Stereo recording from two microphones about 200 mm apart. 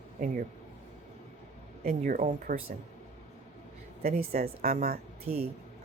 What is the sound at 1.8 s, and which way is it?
Speech, 40° right (ahead or behind).